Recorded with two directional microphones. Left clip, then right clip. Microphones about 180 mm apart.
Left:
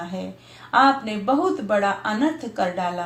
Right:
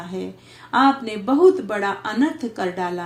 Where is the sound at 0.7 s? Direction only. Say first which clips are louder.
Even; 40° right (ahead or behind).